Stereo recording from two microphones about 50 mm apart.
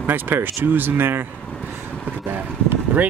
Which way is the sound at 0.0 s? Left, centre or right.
Right.